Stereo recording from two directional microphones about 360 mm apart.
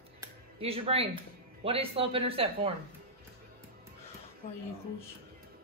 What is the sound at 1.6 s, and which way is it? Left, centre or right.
Speech, centre.